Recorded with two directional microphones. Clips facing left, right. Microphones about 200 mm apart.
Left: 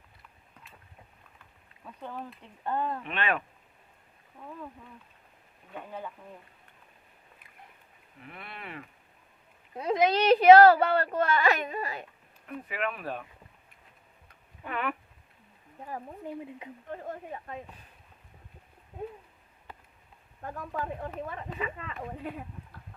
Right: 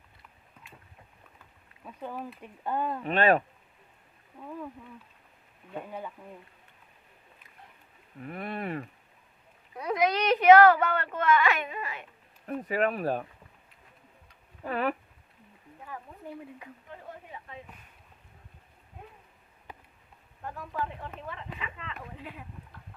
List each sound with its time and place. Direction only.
1.8 s speech: 10° right (ahead or behind)
3.0 s speech: 40° right (ahead or behind)
8.2 s speech: 45° right (ahead or behind)
9.7 s a woman's voice: 25° left (ahead or behind)
12.5 s speech: 40° right (ahead or behind)
14.6 s speech: 35° right (ahead or behind)
15.9 s a woman's voice: 40° left (ahead or behind)
20.4 s speech: 45° left (ahead or behind)